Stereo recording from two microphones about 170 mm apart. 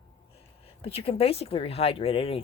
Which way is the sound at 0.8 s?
35° left (ahead or behind).